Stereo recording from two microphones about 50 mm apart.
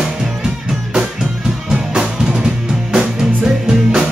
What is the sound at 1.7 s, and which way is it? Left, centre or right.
Music, centre.